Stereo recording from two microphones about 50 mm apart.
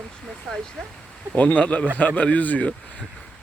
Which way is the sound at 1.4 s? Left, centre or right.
Left.